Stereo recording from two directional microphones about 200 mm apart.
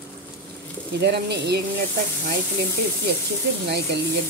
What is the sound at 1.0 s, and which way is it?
Speech, 55° right (ahead or behind).